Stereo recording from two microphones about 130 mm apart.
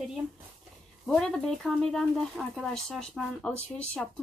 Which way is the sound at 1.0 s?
5° left (ahead or behind).